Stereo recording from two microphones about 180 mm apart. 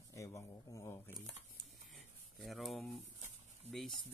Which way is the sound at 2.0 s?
Centre (ahead or behind).